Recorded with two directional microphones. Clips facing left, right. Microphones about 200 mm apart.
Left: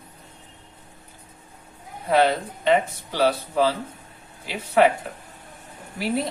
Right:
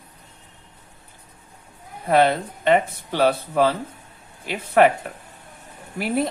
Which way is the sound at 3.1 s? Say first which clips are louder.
Right 2 dB; 55° right (ahead or behind).